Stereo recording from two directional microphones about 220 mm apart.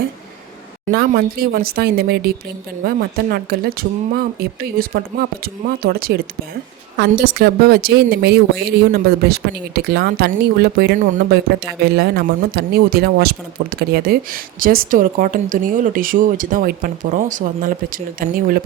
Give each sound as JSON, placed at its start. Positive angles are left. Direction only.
{"t": 0.9, "sound": "a woman's voice", "side_deg": -45}